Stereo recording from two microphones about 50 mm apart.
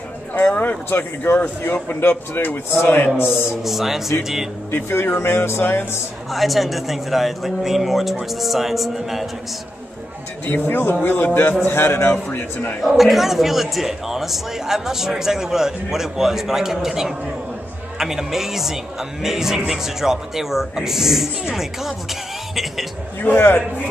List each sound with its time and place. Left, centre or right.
0.8 s speech: left
3.6 s a man's voice: centre
4.6 s speech: left
6.3 s speech: centre
10.4 s a man's voice: left
12.8 s a man's voice: centre
23.2 s a man's voice: left